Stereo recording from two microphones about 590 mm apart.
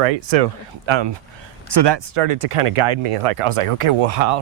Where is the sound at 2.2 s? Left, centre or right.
Right.